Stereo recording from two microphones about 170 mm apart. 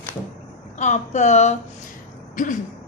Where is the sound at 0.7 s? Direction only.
45° left (ahead or behind).